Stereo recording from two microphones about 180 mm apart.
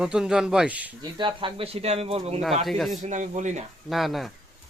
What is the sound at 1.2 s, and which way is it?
Speech, 30° right (ahead or behind).